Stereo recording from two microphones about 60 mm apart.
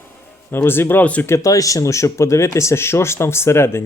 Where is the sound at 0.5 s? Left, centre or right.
Left.